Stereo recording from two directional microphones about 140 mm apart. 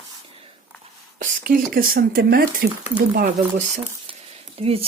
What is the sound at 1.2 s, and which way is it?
Speech, 75° right (ahead or behind).